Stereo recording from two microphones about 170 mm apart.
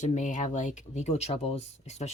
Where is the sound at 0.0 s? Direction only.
45° left (ahead or behind).